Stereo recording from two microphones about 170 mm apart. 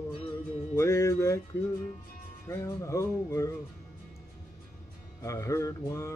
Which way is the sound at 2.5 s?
15° left (ahead or behind).